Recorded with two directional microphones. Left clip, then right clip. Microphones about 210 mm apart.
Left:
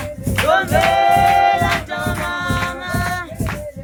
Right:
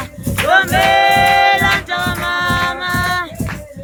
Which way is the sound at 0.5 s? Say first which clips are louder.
Right 4 dB; 25° right (ahead or behind).